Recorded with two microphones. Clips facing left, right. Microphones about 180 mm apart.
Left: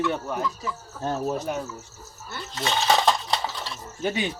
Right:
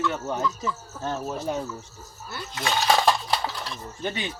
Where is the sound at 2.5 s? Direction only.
5° right (ahead or behind).